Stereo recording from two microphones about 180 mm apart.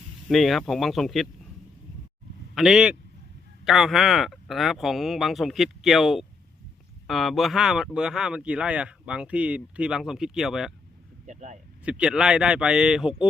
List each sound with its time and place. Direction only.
0.3 s speech: centre (ahead or behind)
2.6 s speech: 5° right (ahead or behind)
11.3 s speech: 40° right (ahead or behind)
11.9 s speech: 5° right (ahead or behind)